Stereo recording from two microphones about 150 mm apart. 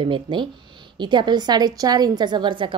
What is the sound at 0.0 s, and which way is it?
A woman's voice, 35° right (ahead or behind).